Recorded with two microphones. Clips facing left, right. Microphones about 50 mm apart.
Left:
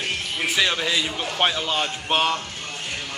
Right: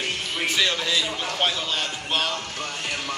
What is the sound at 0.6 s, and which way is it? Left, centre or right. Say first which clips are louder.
Speech: left 2 dB; centre.